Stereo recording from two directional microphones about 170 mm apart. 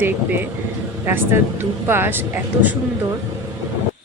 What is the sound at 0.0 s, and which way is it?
A woman's voice, 10° right (ahead or behind).